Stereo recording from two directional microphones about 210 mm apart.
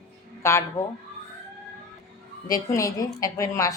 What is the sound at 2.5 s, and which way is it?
A woman's voice, 15° left (ahead or behind).